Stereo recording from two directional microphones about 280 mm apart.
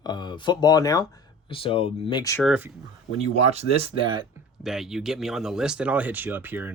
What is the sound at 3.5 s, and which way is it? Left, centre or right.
Speech, right.